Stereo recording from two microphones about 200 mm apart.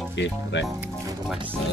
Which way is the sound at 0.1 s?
60° left (ahead or behind).